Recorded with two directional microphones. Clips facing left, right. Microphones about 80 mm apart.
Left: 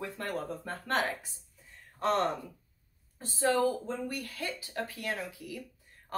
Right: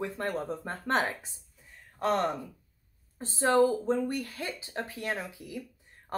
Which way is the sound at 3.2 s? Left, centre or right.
Right.